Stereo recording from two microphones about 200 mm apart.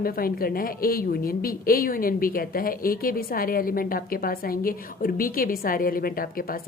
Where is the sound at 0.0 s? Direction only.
45° left (ahead or behind).